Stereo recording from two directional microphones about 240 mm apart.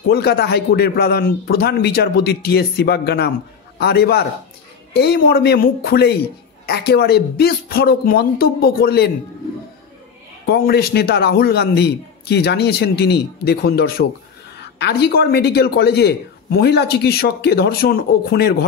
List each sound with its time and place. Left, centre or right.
0.1 s speech: left
10.4 s speech: left